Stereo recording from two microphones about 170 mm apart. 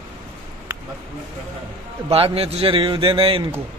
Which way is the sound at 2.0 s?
35° right (ahead or behind).